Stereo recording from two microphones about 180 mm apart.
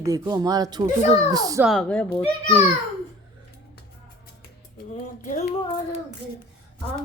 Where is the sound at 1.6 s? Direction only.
5° left (ahead or behind).